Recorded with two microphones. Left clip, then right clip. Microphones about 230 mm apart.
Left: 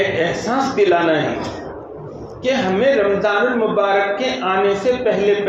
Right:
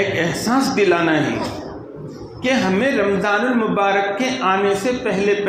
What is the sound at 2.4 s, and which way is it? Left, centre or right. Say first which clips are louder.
A man's voice: left 2 dB; right.